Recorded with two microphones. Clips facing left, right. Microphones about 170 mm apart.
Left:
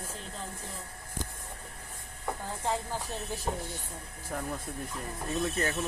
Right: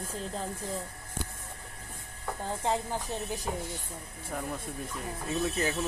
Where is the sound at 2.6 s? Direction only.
20° right (ahead or behind).